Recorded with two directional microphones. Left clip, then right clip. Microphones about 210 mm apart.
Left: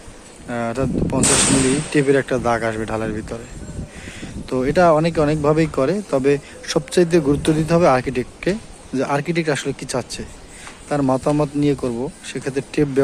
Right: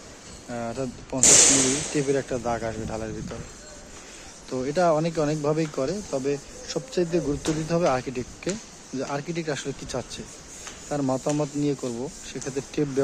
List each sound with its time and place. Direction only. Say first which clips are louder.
0.5 s speech: left 9 dB; 5° left (ahead or behind)
1.2 s speech: even; 55° right (ahead or behind)
2.0 s speech: left 11 dB; 5° left (ahead or behind)
4.4 s speech: left 8 dB; 5° left (ahead or behind)